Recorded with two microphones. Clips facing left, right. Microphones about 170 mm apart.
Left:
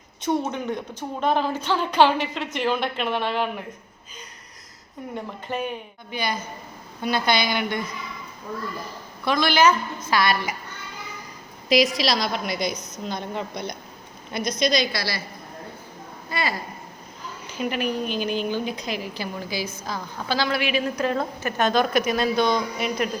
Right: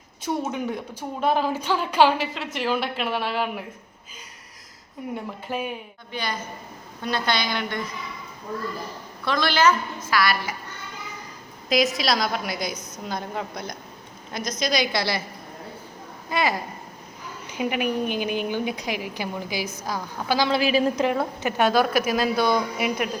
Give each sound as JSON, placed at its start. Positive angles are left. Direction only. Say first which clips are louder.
{"t": 0.2, "sound": "a woman's voice", "louder": "left 2 dB", "side_deg": -5}
{"t": 5.1, "sound": "a woman's voice", "louder": "left 1 dB", "side_deg": -5}
{"t": 6.1, "sound": "a woman's voice", "louder": "left 2 dB", "side_deg": 10}
{"t": 9.2, "sound": "a woman's voice", "louder": "left 2 dB", "side_deg": 15}
{"t": 11.7, "sound": "a woman's voice", "louder": "left 2 dB", "side_deg": 0}
{"t": 14.9, "sound": "a woman's voice", "louder": "right 4 dB", "side_deg": -20}
{"t": 16.3, "sound": "a woman's voice", "louder": "right 4 dB", "side_deg": -15}
{"t": 17.6, "sound": "a woman's voice", "louder": "right 1 dB", "side_deg": -15}
{"t": 20.5, "sound": "a woman's voice", "louder": "right 3 dB", "side_deg": -35}
{"t": 20.9, "sound": "a woman's voice", "louder": "right 1 dB", "side_deg": -15}